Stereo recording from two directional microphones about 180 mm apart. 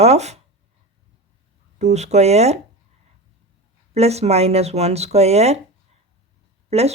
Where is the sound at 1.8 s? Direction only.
40° right (ahead or behind).